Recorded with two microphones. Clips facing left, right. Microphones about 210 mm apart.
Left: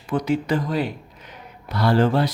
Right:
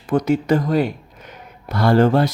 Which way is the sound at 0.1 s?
45° right (ahead or behind).